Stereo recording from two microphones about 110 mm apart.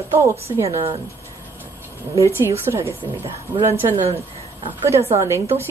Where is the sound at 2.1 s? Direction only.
25° right (ahead or behind).